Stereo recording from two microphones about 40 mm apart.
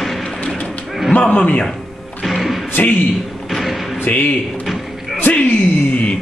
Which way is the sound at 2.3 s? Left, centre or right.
Centre.